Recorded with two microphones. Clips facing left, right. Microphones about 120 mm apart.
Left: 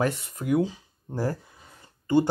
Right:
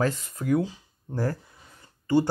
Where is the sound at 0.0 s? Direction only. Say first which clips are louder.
Even; 25° left (ahead or behind).